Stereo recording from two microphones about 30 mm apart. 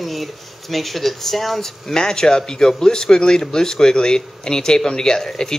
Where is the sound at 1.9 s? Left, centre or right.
Centre.